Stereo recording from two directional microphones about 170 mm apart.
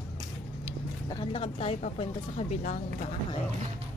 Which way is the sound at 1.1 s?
30° left (ahead or behind).